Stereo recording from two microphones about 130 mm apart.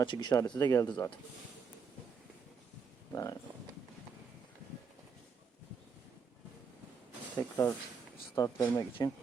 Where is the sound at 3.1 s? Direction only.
30° left (ahead or behind).